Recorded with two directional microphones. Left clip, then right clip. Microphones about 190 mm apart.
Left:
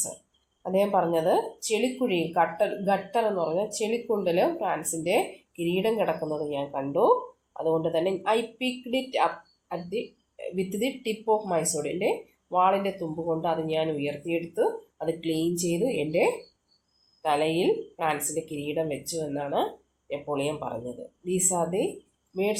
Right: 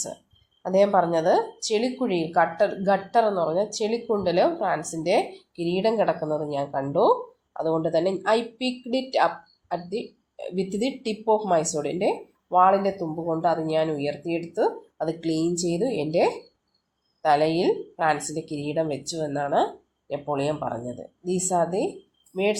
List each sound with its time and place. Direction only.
0.6 s speech: 35° right (ahead or behind)